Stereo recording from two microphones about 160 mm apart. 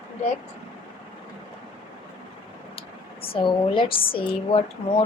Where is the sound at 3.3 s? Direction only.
30° left (ahead or behind).